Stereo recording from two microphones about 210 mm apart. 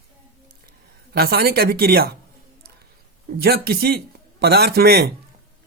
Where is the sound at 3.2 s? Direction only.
45° right (ahead or behind).